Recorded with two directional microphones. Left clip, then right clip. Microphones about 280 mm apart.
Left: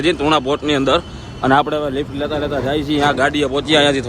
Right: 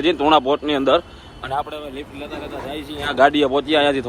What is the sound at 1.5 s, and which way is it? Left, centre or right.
Speech, left.